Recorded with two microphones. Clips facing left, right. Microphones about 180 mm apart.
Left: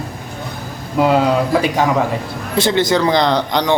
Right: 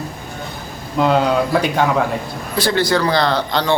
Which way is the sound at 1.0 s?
5° left (ahead or behind).